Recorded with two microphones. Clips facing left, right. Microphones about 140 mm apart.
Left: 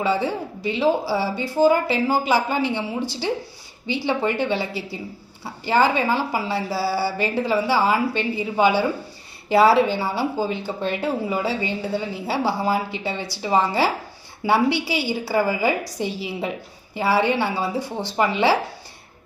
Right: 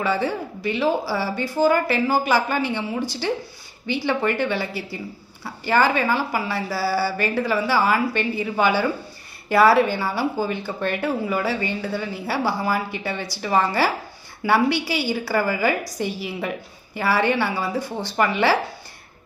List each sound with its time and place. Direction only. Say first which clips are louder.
0.0 s a woman's voice: left 1 dB; 20° left (ahead or behind)